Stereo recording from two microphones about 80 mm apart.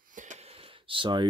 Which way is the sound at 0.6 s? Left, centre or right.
Right.